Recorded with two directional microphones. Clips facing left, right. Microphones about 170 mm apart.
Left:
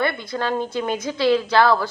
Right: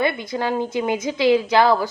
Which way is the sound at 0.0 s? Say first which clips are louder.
Right 1 dB; 15° right (ahead or behind).